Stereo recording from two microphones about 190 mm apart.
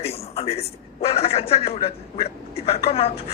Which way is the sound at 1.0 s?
30° left (ahead or behind).